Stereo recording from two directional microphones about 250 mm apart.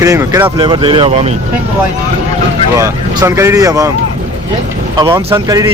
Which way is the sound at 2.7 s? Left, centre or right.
Centre.